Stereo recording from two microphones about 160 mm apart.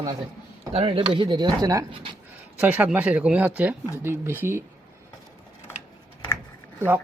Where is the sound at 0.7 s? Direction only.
35° right (ahead or behind).